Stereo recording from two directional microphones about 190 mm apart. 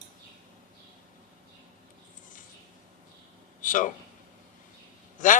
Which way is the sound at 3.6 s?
45° left (ahead or behind).